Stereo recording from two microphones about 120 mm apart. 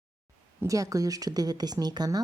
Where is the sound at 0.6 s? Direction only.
25° right (ahead or behind).